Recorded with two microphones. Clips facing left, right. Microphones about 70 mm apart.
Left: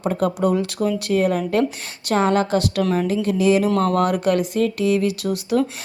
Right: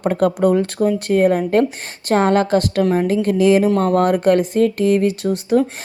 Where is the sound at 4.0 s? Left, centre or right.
Right.